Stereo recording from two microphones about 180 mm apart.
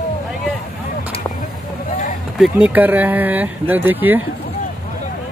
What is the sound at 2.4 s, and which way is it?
Speech, 10° right (ahead or behind).